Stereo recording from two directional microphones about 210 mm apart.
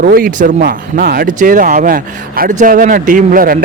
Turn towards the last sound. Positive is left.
turn(degrees=-40)  # may be behind; listen again after turning